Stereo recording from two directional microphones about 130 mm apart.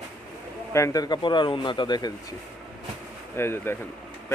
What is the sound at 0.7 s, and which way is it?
Speech, 25° left (ahead or behind).